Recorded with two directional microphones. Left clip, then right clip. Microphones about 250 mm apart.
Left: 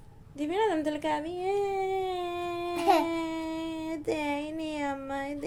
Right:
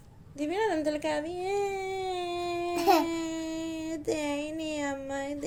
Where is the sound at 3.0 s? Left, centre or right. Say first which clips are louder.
Left 1 dB; left.